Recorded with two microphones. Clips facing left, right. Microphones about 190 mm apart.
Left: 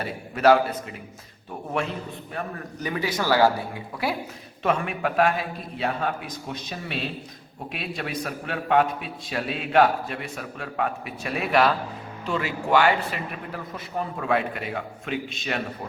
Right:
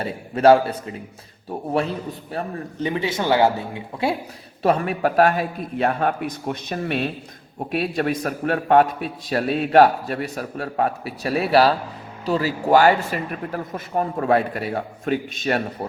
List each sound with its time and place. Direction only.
0.0 s a man's voice: 30° right (ahead or behind)
2.3 s a man's voice: 25° right (ahead or behind)
4.6 s a man's voice: 35° right (ahead or behind)